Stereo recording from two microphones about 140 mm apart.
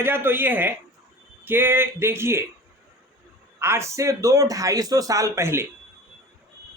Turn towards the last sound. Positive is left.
turn(degrees=-20)  # may be behind; listen again after turning